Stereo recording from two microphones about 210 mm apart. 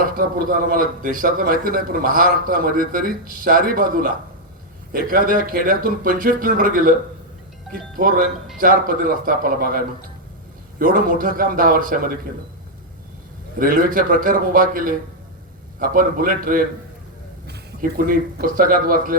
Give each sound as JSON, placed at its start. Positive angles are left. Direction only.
{"t": 0.2, "sound": "a man's voice", "side_deg": -45}
{"t": 10.8, "sound": "speech", "side_deg": -40}
{"t": 13.6, "sound": "a man's voice", "side_deg": -40}